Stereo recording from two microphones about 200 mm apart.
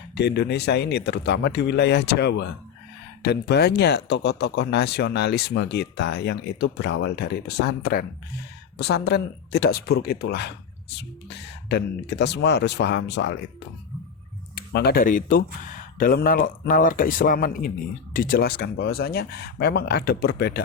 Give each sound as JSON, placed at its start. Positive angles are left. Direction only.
{"t": 0.1, "sound": "speech", "side_deg": 60}
{"t": 14.5, "sound": "speech", "side_deg": 55}